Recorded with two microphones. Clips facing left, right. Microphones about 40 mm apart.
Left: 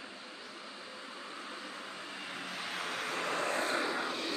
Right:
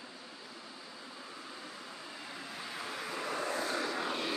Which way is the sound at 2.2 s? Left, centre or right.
Left.